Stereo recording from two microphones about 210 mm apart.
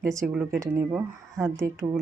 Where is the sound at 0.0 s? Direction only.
15° right (ahead or behind).